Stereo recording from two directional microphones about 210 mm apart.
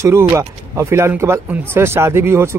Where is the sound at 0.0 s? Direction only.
15° right (ahead or behind).